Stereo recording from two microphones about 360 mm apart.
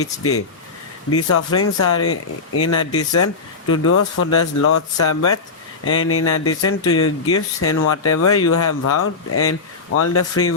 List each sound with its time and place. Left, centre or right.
0.0 s speech: left